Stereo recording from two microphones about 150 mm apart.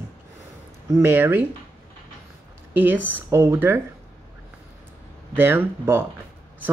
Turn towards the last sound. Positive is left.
turn(degrees=-15)  # may be behind; listen again after turning